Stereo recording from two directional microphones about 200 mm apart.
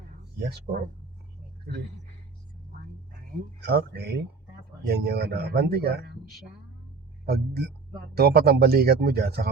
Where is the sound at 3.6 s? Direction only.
55° right (ahead or behind).